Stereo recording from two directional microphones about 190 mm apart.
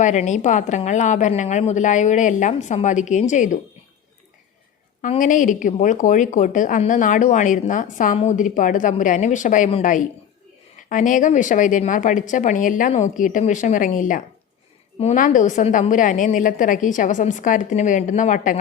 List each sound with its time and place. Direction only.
0.0 s a woman's voice: 40° left (ahead or behind)
5.0 s a woman's voice: 40° left (ahead or behind)